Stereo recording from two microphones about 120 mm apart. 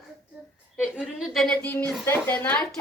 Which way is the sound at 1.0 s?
Centre (ahead or behind).